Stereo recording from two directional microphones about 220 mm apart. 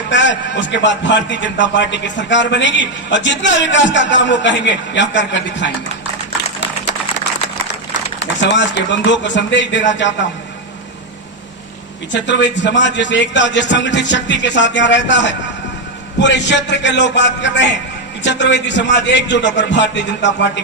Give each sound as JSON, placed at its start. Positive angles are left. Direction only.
{"t": 0.1, "sound": "a man's voice", "side_deg": 55}
{"t": 8.2, "sound": "a man's voice", "side_deg": 55}
{"t": 12.1, "sound": "a man's voice", "side_deg": 55}